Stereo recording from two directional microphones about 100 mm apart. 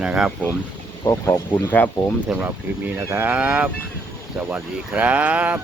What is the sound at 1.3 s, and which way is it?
Speech, 25° left (ahead or behind).